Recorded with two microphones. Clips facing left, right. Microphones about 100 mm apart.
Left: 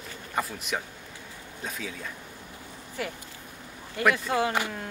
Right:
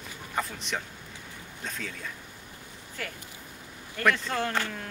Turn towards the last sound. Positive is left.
turn(degrees=10)  # may be behind; listen again after turning